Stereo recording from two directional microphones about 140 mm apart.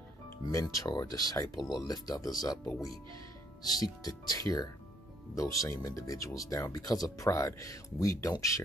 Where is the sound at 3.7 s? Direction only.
30° left (ahead or behind).